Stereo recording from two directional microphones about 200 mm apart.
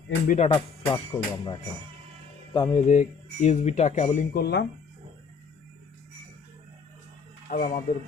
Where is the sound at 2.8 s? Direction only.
35° left (ahead or behind); by 4.6 s 55° left (ahead or behind).